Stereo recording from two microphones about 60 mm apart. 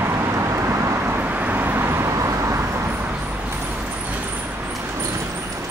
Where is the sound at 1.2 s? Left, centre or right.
Right.